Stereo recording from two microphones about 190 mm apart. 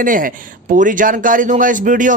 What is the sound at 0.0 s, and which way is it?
Speech, 45° right (ahead or behind).